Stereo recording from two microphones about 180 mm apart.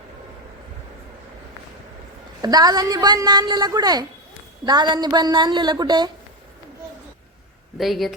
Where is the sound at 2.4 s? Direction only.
20° right (ahead or behind).